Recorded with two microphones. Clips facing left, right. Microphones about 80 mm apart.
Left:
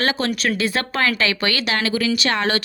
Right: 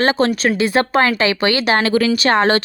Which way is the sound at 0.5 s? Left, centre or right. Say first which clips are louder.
Right 7 dB; right.